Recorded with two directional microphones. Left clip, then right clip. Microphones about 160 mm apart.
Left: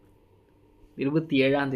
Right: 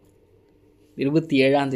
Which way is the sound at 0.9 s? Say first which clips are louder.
Right 4 dB; 25° right (ahead or behind).